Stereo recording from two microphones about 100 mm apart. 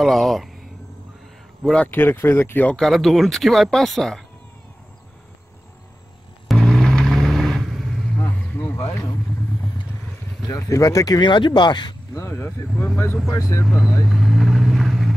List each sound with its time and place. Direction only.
0.0 s speech: centre (ahead or behind)
1.6 s speech: 5° left (ahead or behind)
1.9 s speech: 20° left (ahead or behind)
2.8 s speech: centre (ahead or behind)
6.4 s vehicle: centre (ahead or behind)
8.2 s vehicle: 20° left (ahead or behind)
10.4 s speech: 35° left (ahead or behind)
12.1 s speech: 30° left (ahead or behind)
12.7 s speech: 15° left (ahead or behind)
13.3 s speech: 30° left (ahead or behind)
14.0 s vehicle: 5° right (ahead or behind)